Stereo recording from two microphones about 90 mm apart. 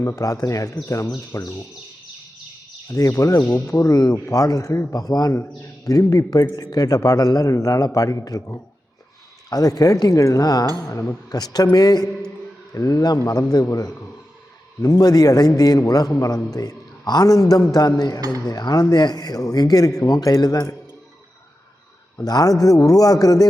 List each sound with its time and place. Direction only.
0.0 s speech: 40° left (ahead or behind)
2.9 s a man's voice: 40° left (ahead or behind)
22.2 s a man's voice: 45° left (ahead or behind)